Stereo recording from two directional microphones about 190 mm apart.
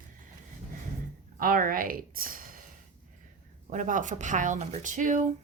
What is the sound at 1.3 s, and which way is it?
A woman's voice, 45° right (ahead or behind).